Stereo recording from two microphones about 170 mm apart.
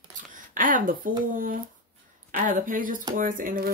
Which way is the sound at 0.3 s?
50° right (ahead or behind).